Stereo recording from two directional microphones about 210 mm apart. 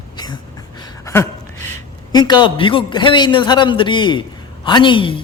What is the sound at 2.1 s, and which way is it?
A man's voice, 20° left (ahead or behind).